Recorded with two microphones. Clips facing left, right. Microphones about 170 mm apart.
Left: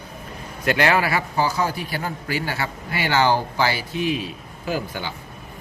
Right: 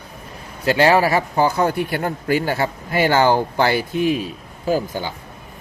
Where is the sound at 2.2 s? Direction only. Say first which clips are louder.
Right 10 dB; 45° right (ahead or behind).